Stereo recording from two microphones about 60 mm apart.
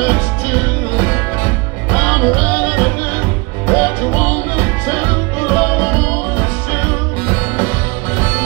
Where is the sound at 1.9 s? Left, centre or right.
Left.